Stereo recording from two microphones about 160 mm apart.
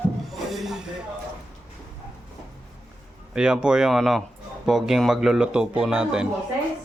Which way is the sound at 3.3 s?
5° right (ahead or behind).